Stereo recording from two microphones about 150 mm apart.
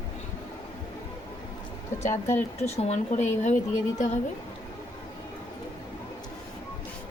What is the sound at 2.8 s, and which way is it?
Speech, 45° left (ahead or behind).